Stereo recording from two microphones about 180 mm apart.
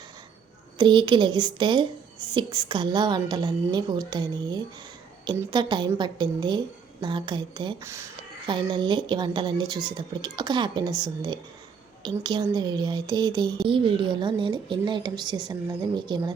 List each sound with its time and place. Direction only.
0.8 s speech: 25° right (ahead or behind)